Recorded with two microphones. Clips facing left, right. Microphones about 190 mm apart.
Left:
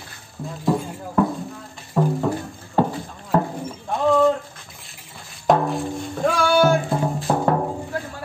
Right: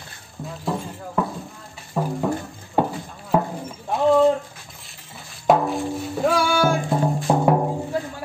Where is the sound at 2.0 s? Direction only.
5° right (ahead or behind).